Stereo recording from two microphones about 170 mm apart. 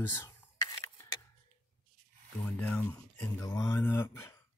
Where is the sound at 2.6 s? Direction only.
10° left (ahead or behind).